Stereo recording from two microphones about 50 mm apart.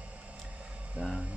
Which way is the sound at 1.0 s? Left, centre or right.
Right.